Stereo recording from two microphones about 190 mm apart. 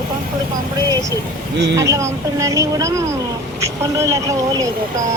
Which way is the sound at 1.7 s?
15° right (ahead or behind).